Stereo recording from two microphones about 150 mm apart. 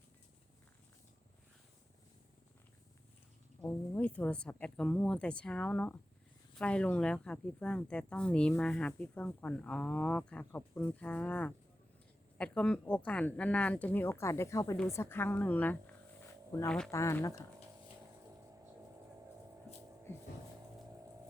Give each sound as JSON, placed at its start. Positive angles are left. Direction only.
{"t": 3.6, "sound": "speech", "side_deg": 10}
{"t": 16.9, "sound": "speech", "side_deg": 20}